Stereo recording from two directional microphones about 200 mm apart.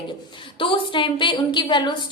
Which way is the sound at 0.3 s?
25° left (ahead or behind).